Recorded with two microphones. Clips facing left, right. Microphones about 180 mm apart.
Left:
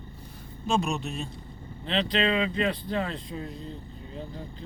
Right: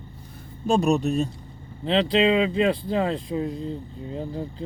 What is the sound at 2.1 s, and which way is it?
Speech, 25° right (ahead or behind).